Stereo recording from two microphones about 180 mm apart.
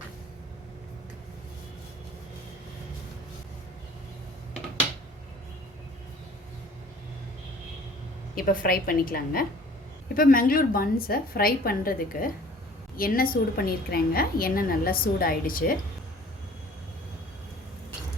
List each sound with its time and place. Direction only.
8.4 s a woman's voice: 50° left (ahead or behind)